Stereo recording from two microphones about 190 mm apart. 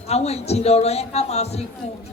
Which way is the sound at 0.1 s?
35° left (ahead or behind).